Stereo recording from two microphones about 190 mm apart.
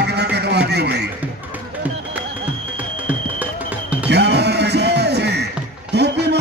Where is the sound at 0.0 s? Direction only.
60° right (ahead or behind).